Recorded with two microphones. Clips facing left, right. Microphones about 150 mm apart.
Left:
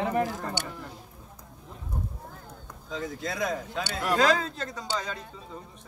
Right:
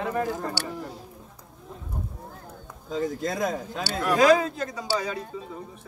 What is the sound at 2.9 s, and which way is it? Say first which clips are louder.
Speech: right 6 dB; 45° right (ahead or behind).